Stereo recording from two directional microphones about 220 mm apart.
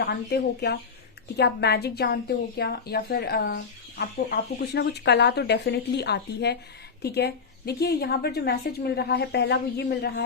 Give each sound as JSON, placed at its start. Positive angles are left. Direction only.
{"t": 0.0, "sound": "speech", "side_deg": 45}